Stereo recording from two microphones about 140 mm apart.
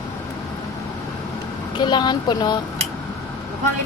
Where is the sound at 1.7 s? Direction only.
35° left (ahead or behind).